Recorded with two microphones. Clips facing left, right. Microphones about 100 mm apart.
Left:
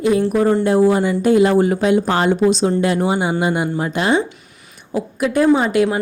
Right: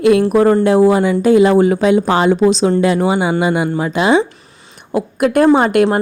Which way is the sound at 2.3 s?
90° right.